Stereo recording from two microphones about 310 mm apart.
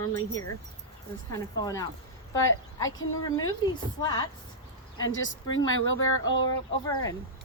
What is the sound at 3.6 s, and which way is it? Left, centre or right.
Speech, centre.